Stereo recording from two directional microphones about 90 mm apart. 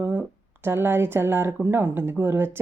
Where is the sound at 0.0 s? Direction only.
20° right (ahead or behind).